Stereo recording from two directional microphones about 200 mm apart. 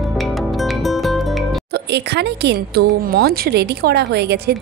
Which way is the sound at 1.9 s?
55° right (ahead or behind).